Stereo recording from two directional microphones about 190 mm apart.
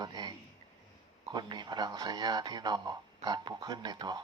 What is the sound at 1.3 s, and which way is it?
Speech, 20° right (ahead or behind).